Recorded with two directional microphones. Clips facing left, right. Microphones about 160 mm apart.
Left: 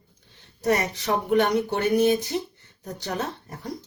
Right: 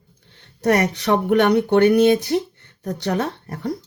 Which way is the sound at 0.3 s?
70° right (ahead or behind).